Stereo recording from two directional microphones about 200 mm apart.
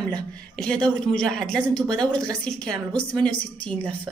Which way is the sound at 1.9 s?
20° right (ahead or behind).